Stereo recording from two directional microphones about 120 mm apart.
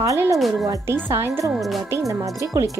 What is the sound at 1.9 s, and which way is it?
Speech, 25° right (ahead or behind).